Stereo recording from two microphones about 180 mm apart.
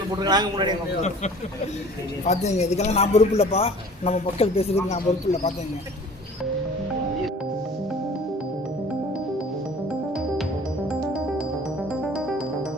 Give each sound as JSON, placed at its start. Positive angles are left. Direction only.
{"t": 0.2, "sound": "a man's voice", "side_deg": -25}
{"t": 2.2, "sound": "speech", "side_deg": 40}